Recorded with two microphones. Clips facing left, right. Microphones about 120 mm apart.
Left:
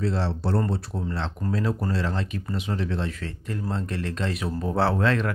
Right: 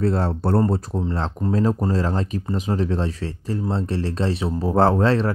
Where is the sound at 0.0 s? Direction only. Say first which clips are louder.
Right 5 dB; 50° right (ahead or behind).